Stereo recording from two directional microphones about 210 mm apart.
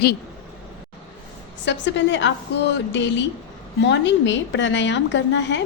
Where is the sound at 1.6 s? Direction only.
60° left (ahead or behind).